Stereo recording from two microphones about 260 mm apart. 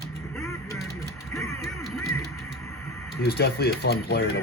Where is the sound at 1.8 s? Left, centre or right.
Centre.